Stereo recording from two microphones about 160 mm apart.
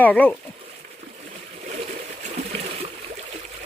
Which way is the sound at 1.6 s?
45° right (ahead or behind).